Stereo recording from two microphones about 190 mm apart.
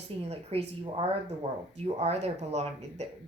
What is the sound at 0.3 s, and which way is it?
Speech, 30° right (ahead or behind).